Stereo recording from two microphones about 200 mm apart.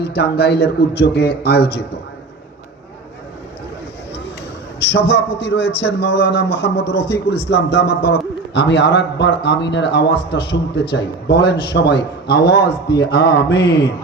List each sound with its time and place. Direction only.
0.0 s a man's voice: 55° left (ahead or behind)
4.8 s a man's voice: 55° left (ahead or behind)